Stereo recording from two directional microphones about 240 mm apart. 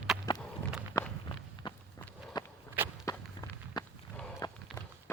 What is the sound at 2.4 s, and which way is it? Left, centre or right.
Walk, centre.